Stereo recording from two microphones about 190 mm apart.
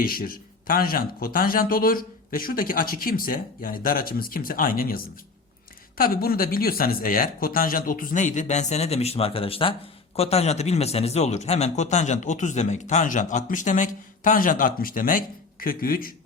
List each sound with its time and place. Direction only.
0.0 s a man's voice: 50° left (ahead or behind)